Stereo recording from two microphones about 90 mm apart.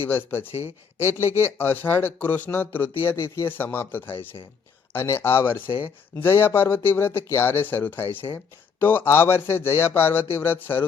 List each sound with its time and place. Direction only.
0.0 s speech: 25° left (ahead or behind)
1.3 s speech: 25° right (ahead or behind)
1.5 s speech: 20° left (ahead or behind)
3.1 s speech: 30° left (ahead or behind)